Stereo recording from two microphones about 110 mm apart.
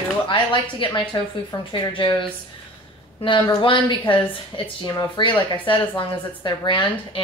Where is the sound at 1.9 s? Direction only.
50° left (ahead or behind).